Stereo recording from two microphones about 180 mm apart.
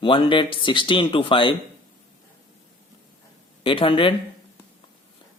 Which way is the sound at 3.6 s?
30° left (ahead or behind).